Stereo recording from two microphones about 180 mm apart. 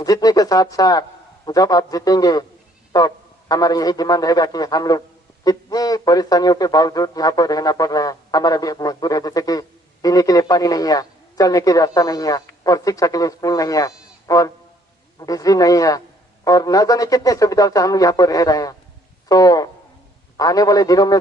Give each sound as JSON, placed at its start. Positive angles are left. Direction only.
{"t": 0.0, "sound": "speech", "side_deg": 20}